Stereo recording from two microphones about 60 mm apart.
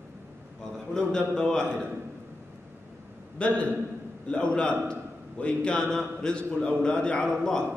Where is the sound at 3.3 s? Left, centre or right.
Left.